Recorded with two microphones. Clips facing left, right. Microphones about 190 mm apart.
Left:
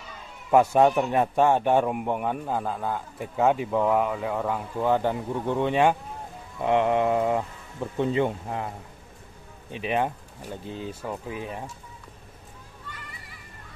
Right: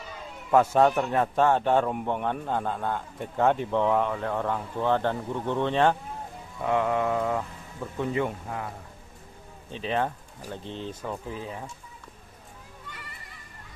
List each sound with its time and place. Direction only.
0.5 s speech: 15° left (ahead or behind)
6.6 s mantra: 20° left (ahead or behind)
9.7 s speech: 15° left (ahead or behind)